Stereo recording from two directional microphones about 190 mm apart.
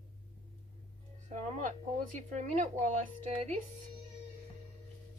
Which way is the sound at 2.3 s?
40° right (ahead or behind).